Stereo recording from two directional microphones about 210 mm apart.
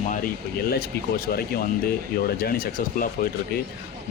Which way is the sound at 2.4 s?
45° left (ahead or behind).